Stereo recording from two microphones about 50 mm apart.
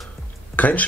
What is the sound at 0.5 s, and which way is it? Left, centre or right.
Speech, left.